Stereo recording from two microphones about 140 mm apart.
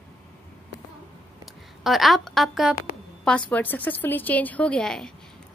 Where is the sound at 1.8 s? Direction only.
Centre (ahead or behind).